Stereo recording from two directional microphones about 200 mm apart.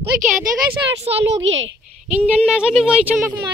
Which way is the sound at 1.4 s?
70° right (ahead or behind).